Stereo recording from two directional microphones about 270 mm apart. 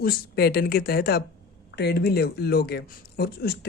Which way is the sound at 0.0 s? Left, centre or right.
Left.